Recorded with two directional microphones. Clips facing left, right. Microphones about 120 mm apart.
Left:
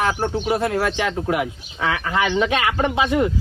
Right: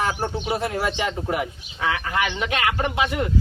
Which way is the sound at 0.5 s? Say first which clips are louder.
Left 4 dB; 90° left.